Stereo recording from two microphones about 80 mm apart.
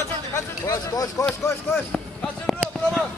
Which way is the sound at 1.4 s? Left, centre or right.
Left.